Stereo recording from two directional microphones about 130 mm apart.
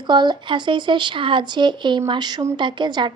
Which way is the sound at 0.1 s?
35° right (ahead or behind).